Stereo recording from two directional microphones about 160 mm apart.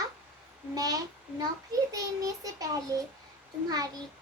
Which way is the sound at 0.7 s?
25° right (ahead or behind).